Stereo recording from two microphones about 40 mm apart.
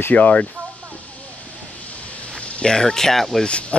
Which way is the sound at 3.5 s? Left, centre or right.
Left.